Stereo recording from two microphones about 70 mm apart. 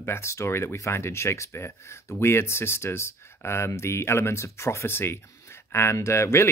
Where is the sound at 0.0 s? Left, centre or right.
Left.